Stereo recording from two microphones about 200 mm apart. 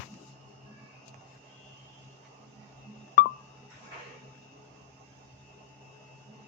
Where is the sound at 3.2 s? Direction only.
50° left (ahead or behind).